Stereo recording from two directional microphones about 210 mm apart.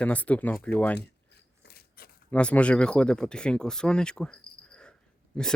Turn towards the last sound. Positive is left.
turn(degrees=5)  # may be behind; listen again after turning